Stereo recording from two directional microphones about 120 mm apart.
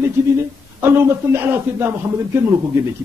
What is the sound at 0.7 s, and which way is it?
A man's voice, 20° right (ahead or behind).